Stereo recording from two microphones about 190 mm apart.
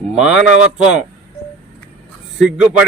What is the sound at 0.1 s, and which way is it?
Speech, 5° right (ahead or behind).